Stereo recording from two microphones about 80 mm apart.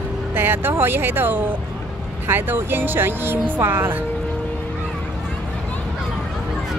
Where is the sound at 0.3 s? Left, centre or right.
Right.